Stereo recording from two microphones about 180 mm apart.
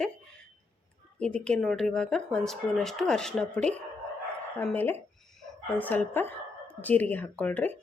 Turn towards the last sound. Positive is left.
turn(degrees=10)  # may be behind; listen again after turning